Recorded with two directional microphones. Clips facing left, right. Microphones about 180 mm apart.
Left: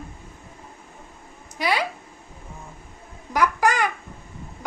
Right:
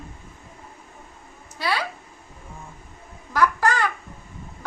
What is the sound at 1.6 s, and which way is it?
Speech, 15° left (ahead or behind).